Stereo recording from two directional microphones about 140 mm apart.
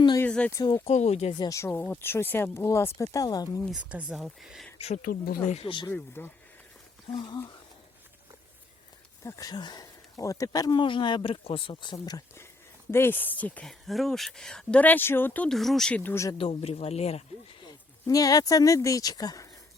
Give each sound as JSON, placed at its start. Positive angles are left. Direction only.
{"t": 0.2, "sound": "a sound", "side_deg": 10}
{"t": 0.5, "sound": "speech", "side_deg": 30}
{"t": 0.9, "sound": "speech", "side_deg": 55}
{"t": 1.3, "sound": "speech", "side_deg": 30}
{"t": 1.5, "sound": "a woman's voice", "side_deg": 15}
{"t": 3.7, "sound": "speech", "side_deg": -10}
{"t": 5.0, "sound": "speech", "side_deg": 90}
{"t": 5.5, "sound": "speech", "side_deg": 45}
{"t": 5.9, "sound": "a woman's voice", "side_deg": 15}
{"t": 7.1, "sound": "speech", "side_deg": 35}
{"t": 9.2, "sound": "a woman's voice", "side_deg": 25}
{"t": 15.5, "sound": "speech", "side_deg": 0}
{"t": 16.4, "sound": "speech", "side_deg": 45}
{"t": 18.0, "sound": "speech", "side_deg": 25}